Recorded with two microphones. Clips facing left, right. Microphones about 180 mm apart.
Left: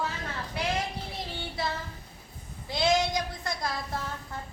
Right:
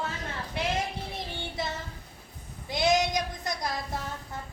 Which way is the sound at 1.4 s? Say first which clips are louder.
Left 2 dB; 20° right (ahead or behind).